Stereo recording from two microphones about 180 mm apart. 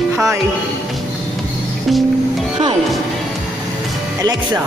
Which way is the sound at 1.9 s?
Centre (ahead or behind).